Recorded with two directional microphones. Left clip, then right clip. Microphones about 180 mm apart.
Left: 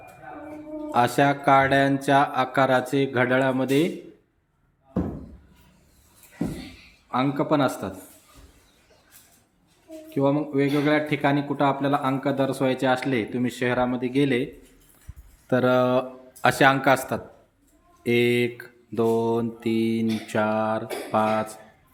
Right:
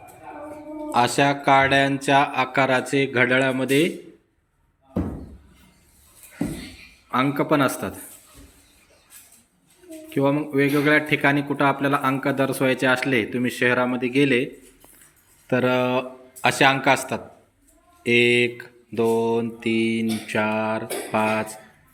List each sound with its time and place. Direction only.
0.9 s a man's voice: 15° left (ahead or behind)
7.1 s a man's voice: 5° left (ahead or behind)
10.1 s a man's voice: 10° left (ahead or behind)
15.4 s mantra: 20° left (ahead or behind)